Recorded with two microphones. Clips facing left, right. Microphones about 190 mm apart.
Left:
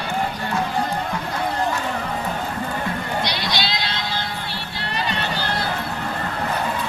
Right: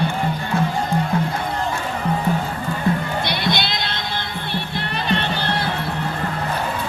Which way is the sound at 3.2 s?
55° right (ahead or behind).